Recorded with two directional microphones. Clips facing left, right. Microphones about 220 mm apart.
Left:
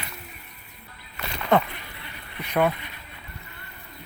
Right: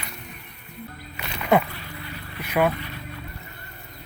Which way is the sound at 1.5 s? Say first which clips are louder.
Right 1 dB; 10° right (ahead or behind).